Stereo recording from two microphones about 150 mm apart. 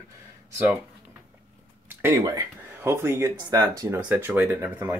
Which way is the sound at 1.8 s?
20° right (ahead or behind).